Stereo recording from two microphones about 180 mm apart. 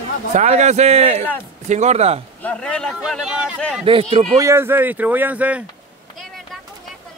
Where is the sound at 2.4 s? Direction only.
5° left (ahead or behind).